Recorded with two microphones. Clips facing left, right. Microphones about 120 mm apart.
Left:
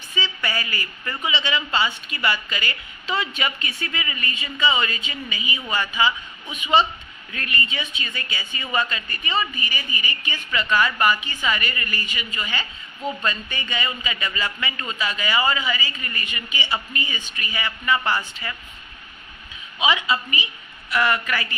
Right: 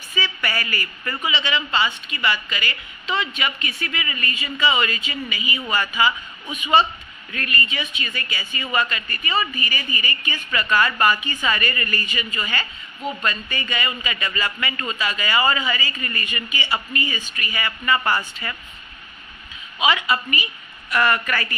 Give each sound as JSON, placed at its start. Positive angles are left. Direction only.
{"t": 0.2, "sound": "a woman's voice", "side_deg": 20}
{"t": 7.3, "sound": "a woman's voice", "side_deg": 25}
{"t": 19.8, "sound": "a man's voice", "side_deg": 15}